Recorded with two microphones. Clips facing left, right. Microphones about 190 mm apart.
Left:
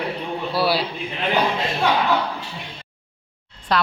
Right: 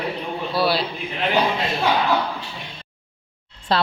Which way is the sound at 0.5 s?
10° left (ahead or behind).